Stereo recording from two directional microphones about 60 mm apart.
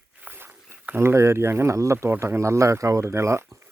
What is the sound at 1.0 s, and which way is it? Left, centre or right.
Speech, right.